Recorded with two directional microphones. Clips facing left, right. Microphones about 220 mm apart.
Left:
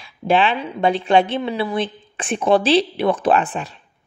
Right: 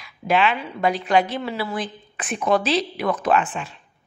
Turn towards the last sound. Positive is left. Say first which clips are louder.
# left 3 dB
turn(degrees=35)  # may be behind; listen again after turning